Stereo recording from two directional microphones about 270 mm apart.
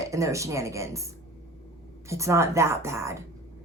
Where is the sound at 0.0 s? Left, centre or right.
Centre.